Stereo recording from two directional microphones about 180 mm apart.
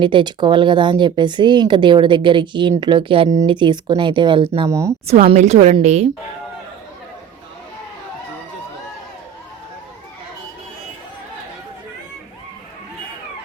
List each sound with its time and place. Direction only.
0.0 s speech: 25° right (ahead or behind)
4.7 s speech: 15° right (ahead or behind)
5.0 s a woman's voice: 35° right (ahead or behind)